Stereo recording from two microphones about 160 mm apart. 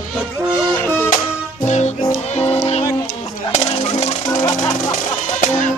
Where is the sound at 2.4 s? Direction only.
40° left (ahead or behind).